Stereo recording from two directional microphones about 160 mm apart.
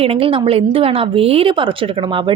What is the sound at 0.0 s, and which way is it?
A woman's voice, 35° right (ahead or behind).